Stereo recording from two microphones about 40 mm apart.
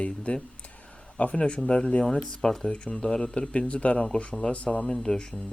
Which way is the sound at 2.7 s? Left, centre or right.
Left.